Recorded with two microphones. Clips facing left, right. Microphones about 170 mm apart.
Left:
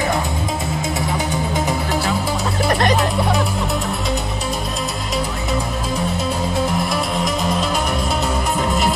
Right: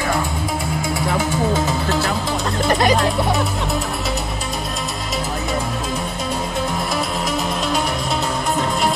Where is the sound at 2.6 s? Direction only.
5° right (ahead or behind).